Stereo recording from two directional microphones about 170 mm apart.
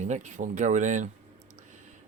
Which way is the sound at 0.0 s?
45° right (ahead or behind).